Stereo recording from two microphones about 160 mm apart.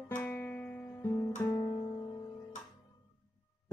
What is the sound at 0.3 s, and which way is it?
Music, 10° left (ahead or behind).